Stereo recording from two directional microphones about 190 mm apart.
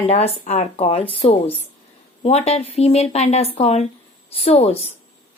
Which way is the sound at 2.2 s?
35° left (ahead or behind).